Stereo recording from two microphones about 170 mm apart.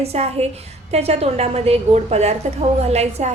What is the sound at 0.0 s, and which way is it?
A woman's voice, 35° right (ahead or behind).